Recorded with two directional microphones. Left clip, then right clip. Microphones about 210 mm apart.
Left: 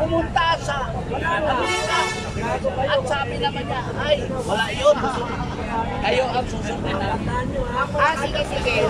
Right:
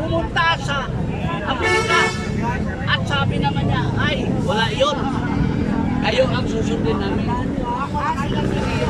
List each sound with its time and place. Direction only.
4.1 s speech: 5° left (ahead or behind)